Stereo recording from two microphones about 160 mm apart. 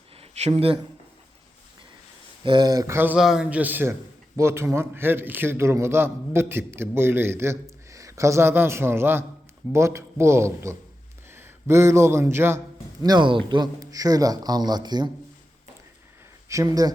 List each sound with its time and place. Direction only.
0.2 s speech: 40° right (ahead or behind)
2.4 s a man's voice: 30° right (ahead or behind)
13.0 s a man's voice: 25° right (ahead or behind)
16.5 s a man's voice: 20° right (ahead or behind)